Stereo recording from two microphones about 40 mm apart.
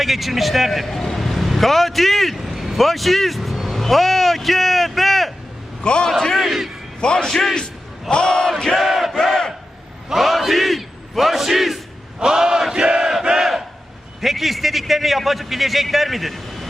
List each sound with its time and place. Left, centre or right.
0.0 s a man's voice: centre
5.8 s a man's voice: left
6.1 s speech: centre
6.3 s a man's voice: centre
7.0 s a man's voice: left
7.3 s speech: centre
8.1 s speech: centre
8.8 s battle cry: centre
9.1 s battle cry: centre
10.1 s battle cry: centre
12.2 s a sound: centre
12.8 s a sound: right
13.4 s battle cry: centre
14.2 s a man's voice: centre